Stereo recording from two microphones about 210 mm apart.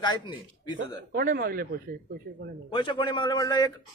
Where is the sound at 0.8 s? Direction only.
45° right (ahead or behind).